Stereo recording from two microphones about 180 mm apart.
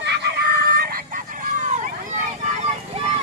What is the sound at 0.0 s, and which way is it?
Vehicle, 70° right (ahead or behind).